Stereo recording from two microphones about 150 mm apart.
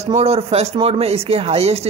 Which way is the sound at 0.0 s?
45° right (ahead or behind).